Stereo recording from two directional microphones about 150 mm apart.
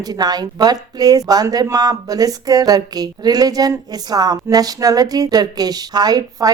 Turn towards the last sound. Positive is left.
turn(degrees=-25)  # may be behind; listen again after turning